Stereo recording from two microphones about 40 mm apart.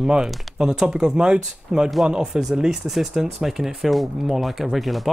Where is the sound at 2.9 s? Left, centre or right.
Centre.